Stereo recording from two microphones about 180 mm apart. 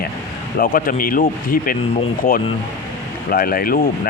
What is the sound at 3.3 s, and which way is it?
Speech, 55° left (ahead or behind).